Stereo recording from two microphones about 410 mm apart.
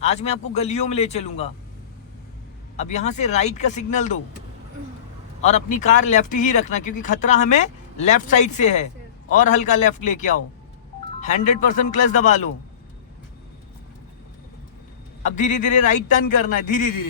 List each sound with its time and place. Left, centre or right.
0.0 s speech: centre
2.7 s speech: centre
5.4 s speech: centre
15.2 s speech: centre